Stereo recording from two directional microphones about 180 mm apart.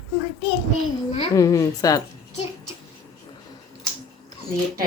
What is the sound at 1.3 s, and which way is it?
Speech, 15° left (ahead or behind).